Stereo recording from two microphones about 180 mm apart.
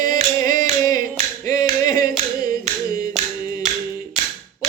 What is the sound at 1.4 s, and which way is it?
Clapping, 20° left (ahead or behind).